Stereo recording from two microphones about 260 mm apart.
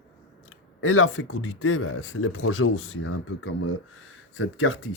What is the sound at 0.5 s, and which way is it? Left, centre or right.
Speech, left.